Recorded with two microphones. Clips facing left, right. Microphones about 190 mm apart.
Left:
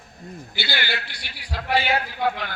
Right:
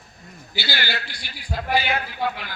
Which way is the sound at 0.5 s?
55° left (ahead or behind).